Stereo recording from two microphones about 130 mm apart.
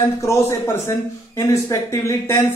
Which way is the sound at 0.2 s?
20° left (ahead or behind).